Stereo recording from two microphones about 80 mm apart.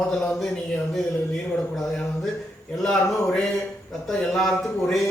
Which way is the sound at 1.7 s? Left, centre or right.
Centre.